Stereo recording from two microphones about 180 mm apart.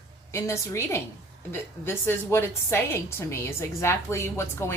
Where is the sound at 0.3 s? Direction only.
15° left (ahead or behind).